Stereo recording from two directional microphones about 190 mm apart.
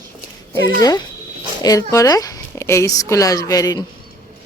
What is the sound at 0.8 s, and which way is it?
A child's voice, 20° left (ahead or behind).